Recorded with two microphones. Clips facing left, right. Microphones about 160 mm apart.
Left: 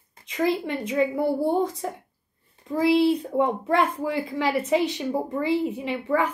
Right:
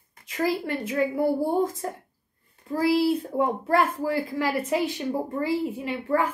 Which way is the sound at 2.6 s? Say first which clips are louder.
Left 2 dB; 5° right (ahead or behind).